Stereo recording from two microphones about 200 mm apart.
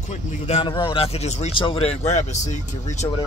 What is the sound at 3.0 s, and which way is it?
Speech, 20° left (ahead or behind).